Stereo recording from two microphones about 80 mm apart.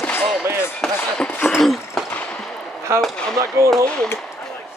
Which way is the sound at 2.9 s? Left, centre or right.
Right.